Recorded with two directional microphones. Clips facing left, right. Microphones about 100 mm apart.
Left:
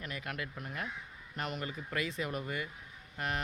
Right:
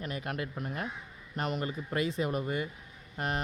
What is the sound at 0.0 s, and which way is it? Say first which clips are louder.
Speech: right 5 dB; 30° right (ahead or behind).